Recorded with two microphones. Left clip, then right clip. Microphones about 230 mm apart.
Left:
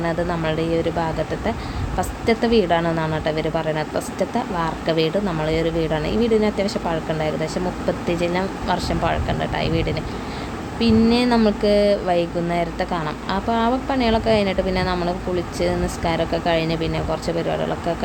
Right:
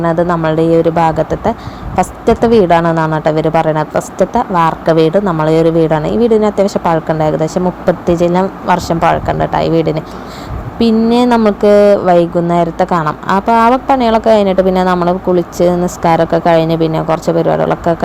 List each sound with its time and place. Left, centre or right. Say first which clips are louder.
0.4 s a woman's voice: right 12 dB; right